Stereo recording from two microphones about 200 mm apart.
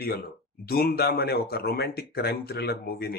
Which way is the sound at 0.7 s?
50° left (ahead or behind).